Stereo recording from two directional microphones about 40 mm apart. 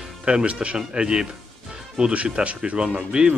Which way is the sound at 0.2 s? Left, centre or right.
Right.